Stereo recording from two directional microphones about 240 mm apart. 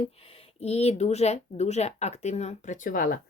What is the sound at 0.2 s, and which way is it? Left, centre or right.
A woman's voice, left.